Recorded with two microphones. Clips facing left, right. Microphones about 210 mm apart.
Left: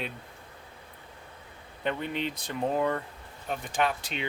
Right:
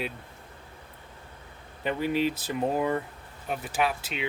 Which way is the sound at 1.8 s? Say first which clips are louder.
Right 5 dB; 5° right (ahead or behind).